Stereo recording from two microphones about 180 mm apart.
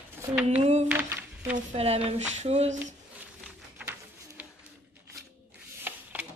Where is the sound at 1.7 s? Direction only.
35° right (ahead or behind).